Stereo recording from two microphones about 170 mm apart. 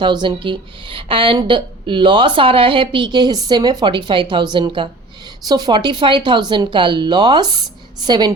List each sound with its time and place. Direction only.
0.0 s speech: 25° right (ahead or behind)